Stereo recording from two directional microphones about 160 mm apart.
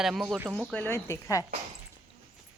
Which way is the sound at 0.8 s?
15° left (ahead or behind).